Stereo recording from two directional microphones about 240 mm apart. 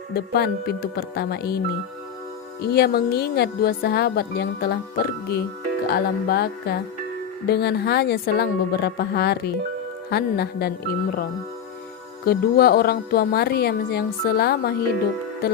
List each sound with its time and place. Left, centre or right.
0.1 s a woman's voice: left